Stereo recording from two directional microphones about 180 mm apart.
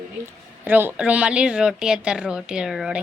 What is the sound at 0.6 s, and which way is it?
A man's voice, 10° right (ahead or behind).